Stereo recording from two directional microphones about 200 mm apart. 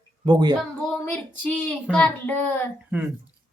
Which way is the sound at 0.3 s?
20° right (ahead or behind).